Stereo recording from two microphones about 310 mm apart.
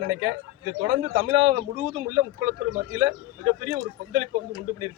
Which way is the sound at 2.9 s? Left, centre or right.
Right.